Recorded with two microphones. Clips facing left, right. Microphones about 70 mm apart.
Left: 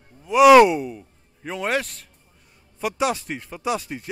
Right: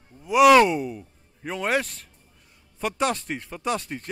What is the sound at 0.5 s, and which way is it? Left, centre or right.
Speech, centre.